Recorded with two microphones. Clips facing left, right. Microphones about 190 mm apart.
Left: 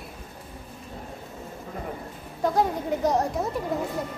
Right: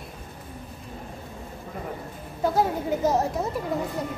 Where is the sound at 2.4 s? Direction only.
5° right (ahead or behind).